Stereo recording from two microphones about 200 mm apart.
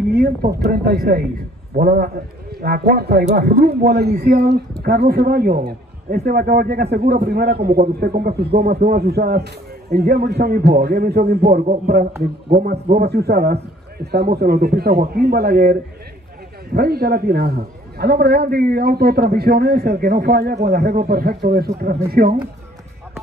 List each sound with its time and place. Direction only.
0.1 s a sound: 50° right (ahead or behind)
0.7 s a man's voice: 50° right (ahead or behind)
13.1 s a man's voice: 50° right (ahead or behind)